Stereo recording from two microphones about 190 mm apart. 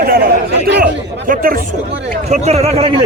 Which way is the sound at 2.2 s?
35° right (ahead or behind).